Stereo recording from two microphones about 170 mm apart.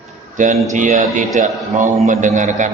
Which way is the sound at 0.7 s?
45° right (ahead or behind).